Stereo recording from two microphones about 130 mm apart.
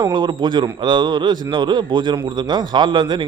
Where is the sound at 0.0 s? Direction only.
35° right (ahead or behind).